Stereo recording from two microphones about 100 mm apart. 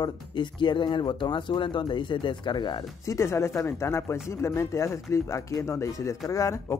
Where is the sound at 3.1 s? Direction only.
30° left (ahead or behind).